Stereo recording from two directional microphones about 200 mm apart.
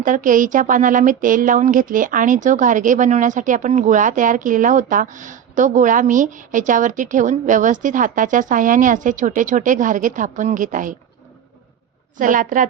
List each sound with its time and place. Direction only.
0.0 s speech: 40° right (ahead or behind)
12.1 s speech: 40° right (ahead or behind)